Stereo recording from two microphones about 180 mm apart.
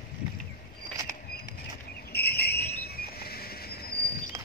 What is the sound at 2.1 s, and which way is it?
Cricket, 60° left (ahead or behind).